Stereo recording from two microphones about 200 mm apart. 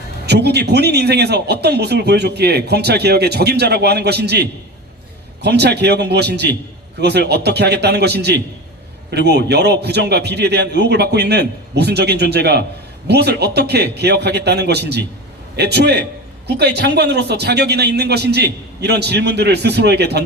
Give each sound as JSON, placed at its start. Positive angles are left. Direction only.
{"t": 0.3, "sound": "a man's voice", "side_deg": -55}